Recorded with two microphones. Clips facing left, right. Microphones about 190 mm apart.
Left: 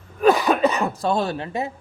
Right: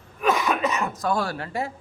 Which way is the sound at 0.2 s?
35° left (ahead or behind).